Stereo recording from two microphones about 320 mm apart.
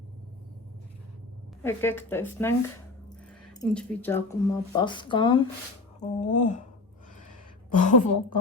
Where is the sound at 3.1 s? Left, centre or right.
Centre.